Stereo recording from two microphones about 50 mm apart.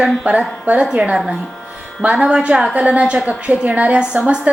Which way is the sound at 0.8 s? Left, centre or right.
Centre.